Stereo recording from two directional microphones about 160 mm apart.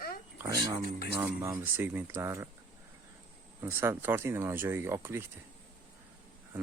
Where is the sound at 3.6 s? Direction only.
15° right (ahead or behind).